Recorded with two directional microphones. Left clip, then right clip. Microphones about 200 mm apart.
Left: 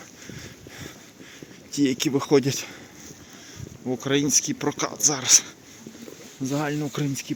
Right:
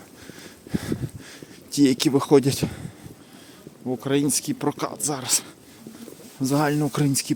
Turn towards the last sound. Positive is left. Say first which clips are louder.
# right 5 dB
turn(degrees=-35)  # may be behind; listen again after turning